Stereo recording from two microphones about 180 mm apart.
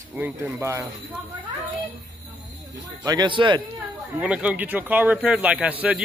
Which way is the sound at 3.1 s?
25° right (ahead or behind).